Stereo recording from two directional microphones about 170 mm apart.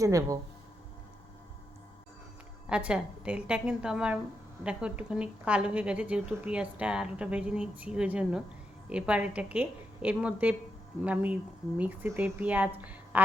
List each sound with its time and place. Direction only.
0.0 s speech: 20° right (ahead or behind)
2.6 s a woman's voice: 5° right (ahead or behind)